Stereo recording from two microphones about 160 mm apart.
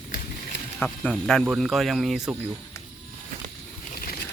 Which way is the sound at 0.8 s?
5° left (ahead or behind).